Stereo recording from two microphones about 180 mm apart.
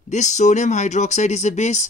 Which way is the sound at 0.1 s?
40° left (ahead or behind).